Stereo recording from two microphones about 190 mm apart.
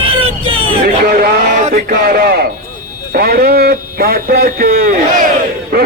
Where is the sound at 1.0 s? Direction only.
50° right (ahead or behind).